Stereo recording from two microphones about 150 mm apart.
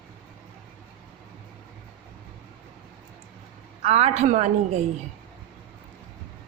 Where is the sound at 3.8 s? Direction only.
45° right (ahead or behind).